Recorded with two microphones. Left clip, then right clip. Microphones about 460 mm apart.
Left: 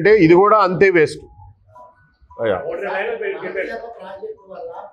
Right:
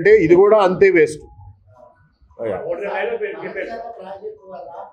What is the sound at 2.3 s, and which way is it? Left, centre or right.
Speech, left.